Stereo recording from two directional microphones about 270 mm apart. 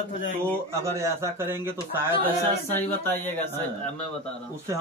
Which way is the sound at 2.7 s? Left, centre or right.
Centre.